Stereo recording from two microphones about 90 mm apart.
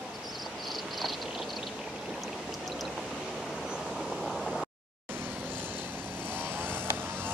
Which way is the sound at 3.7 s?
Centre (ahead or behind).